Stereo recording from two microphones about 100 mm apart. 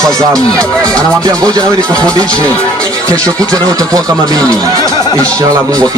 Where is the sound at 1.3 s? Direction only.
40° right (ahead or behind).